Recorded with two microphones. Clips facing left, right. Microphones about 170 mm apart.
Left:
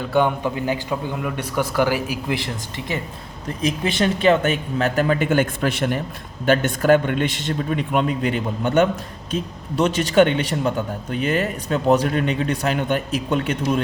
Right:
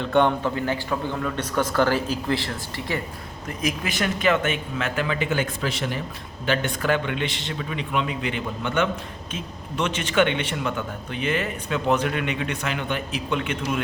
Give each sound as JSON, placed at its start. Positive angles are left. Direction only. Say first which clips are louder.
{"t": 0.0, "sound": "a man's voice", "louder": "left 1 dB", "side_deg": 5}